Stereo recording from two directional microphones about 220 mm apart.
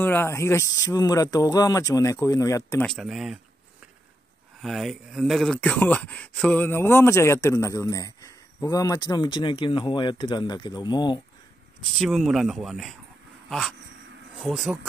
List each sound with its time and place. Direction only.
0.0 s speech: 10° left (ahead or behind)
2.9 s speech: centre (ahead or behind)
4.6 s speech: centre (ahead or behind); by 11.1 s 20° left (ahead or behind)
12.0 s speech: centre (ahead or behind)